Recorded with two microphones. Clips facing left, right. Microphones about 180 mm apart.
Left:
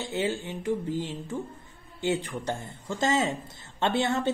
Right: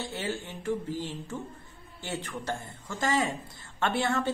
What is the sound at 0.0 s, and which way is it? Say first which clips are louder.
A woman's voice: left 5 dB; 20° left (ahead or behind).